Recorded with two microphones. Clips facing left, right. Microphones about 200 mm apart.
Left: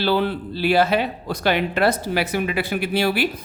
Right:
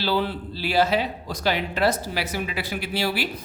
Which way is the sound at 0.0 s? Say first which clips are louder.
Left 4 dB; 60° left (ahead or behind).